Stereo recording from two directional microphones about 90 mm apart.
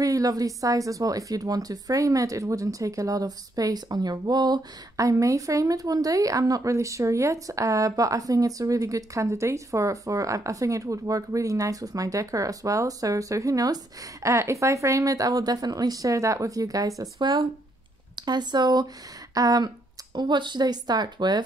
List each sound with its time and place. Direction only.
0.0 s a woman's voice: 40° right (ahead or behind)
17.0 s speech: 55° right (ahead or behind)
20.2 s speech: 55° right (ahead or behind)